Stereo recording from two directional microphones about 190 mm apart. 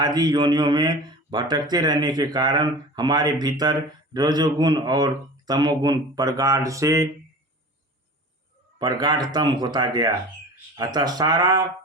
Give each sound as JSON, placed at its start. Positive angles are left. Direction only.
{"t": 0.0, "sound": "speech", "side_deg": -20}
{"t": 8.8, "sound": "speech", "side_deg": -20}